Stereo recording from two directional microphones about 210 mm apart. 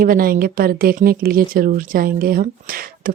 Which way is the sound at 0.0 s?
45° right (ahead or behind).